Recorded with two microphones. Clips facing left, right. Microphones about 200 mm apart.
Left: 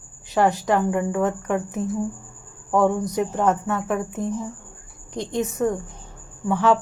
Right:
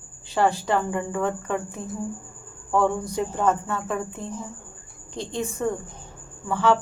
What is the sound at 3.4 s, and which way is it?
A woman's voice, 15° left (ahead or behind).